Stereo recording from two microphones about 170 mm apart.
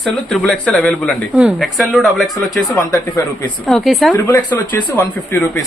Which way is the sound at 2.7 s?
20° left (ahead or behind).